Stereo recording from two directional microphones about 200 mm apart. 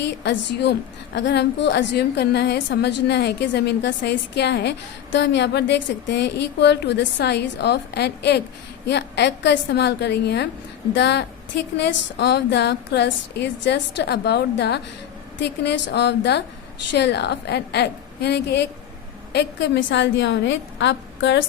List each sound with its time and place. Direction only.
0.0 s a woman's voice: 60° left (ahead or behind)